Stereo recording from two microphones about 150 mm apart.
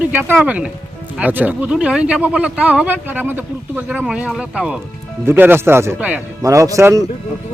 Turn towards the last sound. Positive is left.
turn(degrees=-20)  # may be behind; listen again after turning